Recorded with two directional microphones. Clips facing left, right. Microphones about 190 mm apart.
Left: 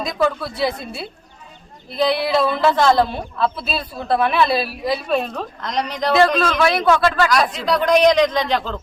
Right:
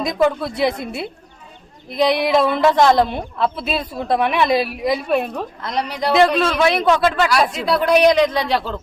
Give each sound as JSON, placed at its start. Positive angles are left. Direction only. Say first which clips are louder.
{"t": 0.0, "sound": "a woman's voice", "louder": "right 3 dB", "side_deg": -20}
{"t": 6.5, "sound": "speech", "louder": "right 1 dB", "side_deg": -20}
{"t": 7.5, "sound": "a woman's voice", "louder": "right 1 dB", "side_deg": -5}